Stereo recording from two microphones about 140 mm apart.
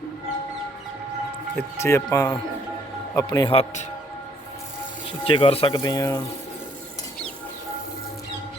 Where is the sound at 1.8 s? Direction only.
20° left (ahead or behind).